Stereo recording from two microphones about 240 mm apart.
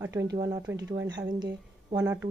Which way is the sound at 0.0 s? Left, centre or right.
Centre.